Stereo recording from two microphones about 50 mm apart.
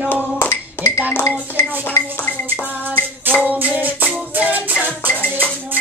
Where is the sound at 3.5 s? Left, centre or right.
Right.